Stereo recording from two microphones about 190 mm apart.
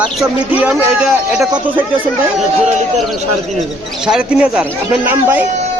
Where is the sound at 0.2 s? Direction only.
10° right (ahead or behind).